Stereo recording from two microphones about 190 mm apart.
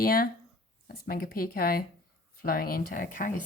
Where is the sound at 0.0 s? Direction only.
50° left (ahead or behind).